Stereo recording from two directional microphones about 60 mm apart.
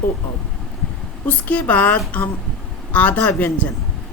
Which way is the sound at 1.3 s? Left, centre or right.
Left.